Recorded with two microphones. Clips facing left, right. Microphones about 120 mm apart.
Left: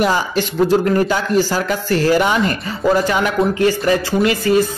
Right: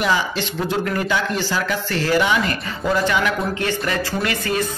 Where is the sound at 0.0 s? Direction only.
45° left (ahead or behind).